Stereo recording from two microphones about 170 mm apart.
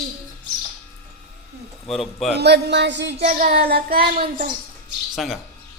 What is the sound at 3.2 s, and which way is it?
Child singing, 50° right (ahead or behind).